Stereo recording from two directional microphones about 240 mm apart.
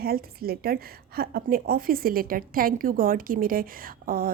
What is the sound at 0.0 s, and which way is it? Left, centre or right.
Speech, right.